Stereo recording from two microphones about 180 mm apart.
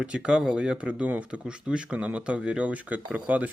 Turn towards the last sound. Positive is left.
turn(degrees=-10)  # may be behind; listen again after turning